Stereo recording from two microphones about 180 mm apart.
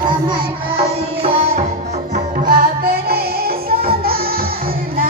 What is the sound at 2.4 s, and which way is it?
Music, 60° right (ahead or behind).